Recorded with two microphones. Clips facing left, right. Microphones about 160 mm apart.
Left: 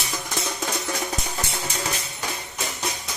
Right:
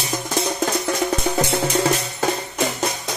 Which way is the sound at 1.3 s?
70° right (ahead or behind).